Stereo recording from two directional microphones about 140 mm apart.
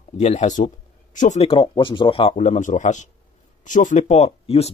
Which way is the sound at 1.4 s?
40° left (ahead or behind).